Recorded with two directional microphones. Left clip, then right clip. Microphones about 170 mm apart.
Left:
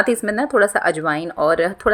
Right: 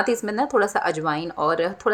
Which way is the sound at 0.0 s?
20° left (ahead or behind).